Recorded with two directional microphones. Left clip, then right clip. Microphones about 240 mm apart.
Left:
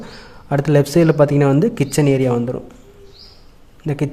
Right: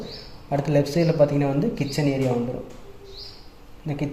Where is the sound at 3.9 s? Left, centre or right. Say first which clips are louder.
Left 7 dB; left.